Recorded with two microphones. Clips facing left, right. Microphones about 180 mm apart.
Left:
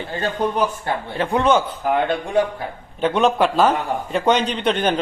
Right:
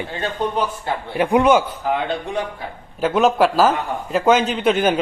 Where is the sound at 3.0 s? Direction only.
5° right (ahead or behind).